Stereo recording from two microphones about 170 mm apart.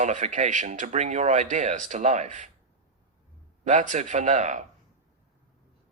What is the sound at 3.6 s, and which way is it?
Speech, 45° right (ahead or behind).